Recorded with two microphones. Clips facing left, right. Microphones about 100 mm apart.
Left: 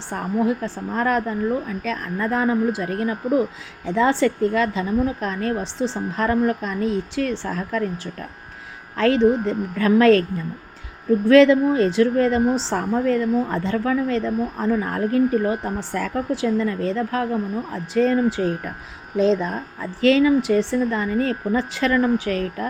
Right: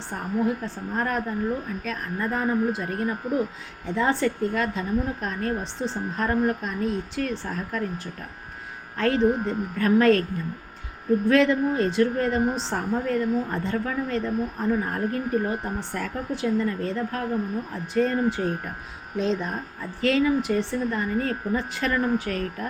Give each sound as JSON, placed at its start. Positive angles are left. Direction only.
{"t": 0.1, "sound": "a woman's voice", "side_deg": 90}
{"t": 11.3, "sound": "a woman's voice", "side_deg": 90}
{"t": 19.8, "sound": "a woman's voice", "side_deg": 90}